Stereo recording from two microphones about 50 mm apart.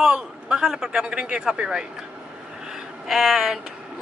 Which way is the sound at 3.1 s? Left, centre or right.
Centre.